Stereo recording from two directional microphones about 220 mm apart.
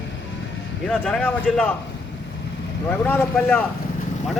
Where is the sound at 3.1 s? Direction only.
5° left (ahead or behind).